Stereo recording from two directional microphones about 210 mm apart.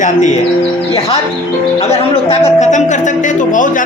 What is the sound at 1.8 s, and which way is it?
A man's voice, 30° left (ahead or behind).